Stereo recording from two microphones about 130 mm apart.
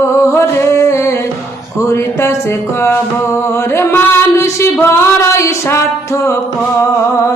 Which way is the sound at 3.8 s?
20° left (ahead or behind).